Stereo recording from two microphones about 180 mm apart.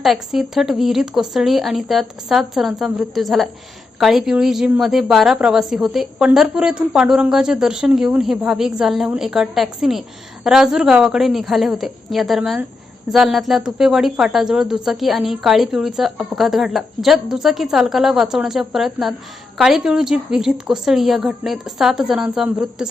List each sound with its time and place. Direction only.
0.0 s a woman's voice: centre (ahead or behind)